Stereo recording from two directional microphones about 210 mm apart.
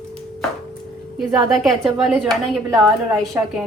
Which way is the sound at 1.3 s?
Centre (ahead or behind).